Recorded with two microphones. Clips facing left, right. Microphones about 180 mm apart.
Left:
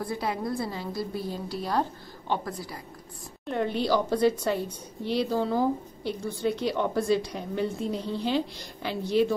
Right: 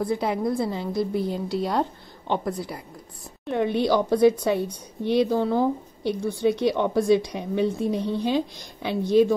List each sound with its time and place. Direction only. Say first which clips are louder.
0.0 s a woman's voice: right 6 dB; 20° right (ahead or behind)
3.4 s a woman's voice: right 4 dB; 15° right (ahead or behind)
5.4 s speech: right 3 dB; 10° left (ahead or behind)
6.4 s a woman's voice: right 5 dB; 15° right (ahead or behind)